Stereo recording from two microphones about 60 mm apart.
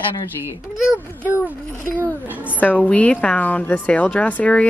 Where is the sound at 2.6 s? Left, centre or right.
Left.